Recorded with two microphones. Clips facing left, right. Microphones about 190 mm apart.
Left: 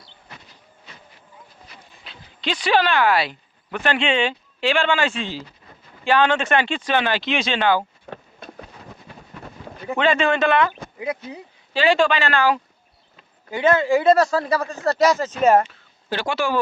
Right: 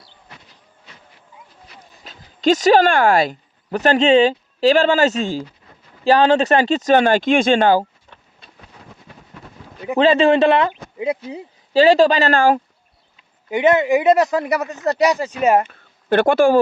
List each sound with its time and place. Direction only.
2.0 s speech: 45° right (ahead or behind)
8.1 s a sound: 65° left (ahead or behind)
10.0 s speech: 35° right (ahead or behind)
11.7 s speech: 40° right (ahead or behind)
13.5 s speech: 20° right (ahead or behind)
15.6 s speech: 55° right (ahead or behind)